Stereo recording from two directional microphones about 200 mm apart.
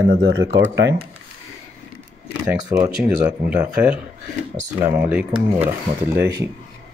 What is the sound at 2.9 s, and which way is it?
Speech, 5° right (ahead or behind).